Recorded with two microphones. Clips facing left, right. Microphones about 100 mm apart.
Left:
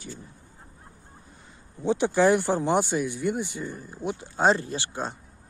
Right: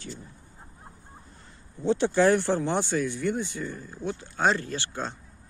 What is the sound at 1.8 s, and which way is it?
Speech, 10° left (ahead or behind).